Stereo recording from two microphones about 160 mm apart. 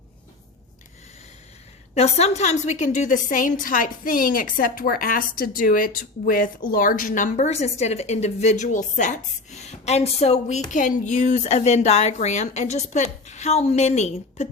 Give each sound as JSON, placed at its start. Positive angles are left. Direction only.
{"t": 2.0, "sound": "a woman's voice", "side_deg": 40}